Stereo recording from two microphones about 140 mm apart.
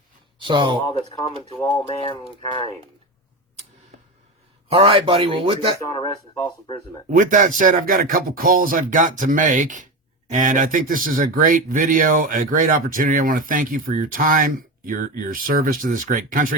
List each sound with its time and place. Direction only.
0.3 s speech: 35° right (ahead or behind)
1.1 s speech: 30° left (ahead or behind)
2.0 s speech: 40° left (ahead or behind)
4.7 s speech: 40° right (ahead or behind)
5.9 s speech: 35° left (ahead or behind)
7.1 s speech: 70° right (ahead or behind)